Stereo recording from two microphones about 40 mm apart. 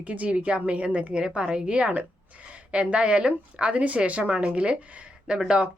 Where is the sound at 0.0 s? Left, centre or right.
Right.